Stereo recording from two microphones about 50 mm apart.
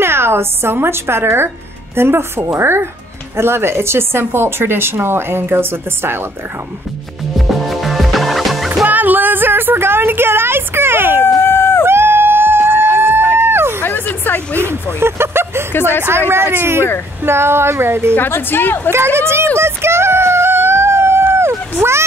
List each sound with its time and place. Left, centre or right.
0.0 s speech: right
7.3 s music: centre
8.8 s a woman's voice: right
11.2 s run: left
11.8 s music: right
13.5 s a sound: right
13.8 s speech: left
14.6 s speech: right
15.7 s speech: left
16.3 s speech: right
18.1 s a woman's voice: left
18.9 s a sound: right